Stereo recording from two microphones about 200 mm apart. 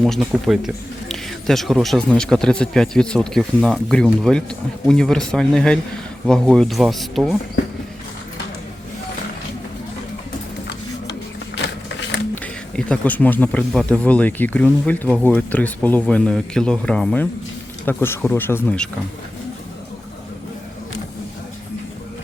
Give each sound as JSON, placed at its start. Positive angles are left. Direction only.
{"t": 0.0, "sound": "speech", "side_deg": 0}
{"t": 11.5, "sound": "a sound", "side_deg": 65}
{"t": 12.3, "sound": "speech", "side_deg": 5}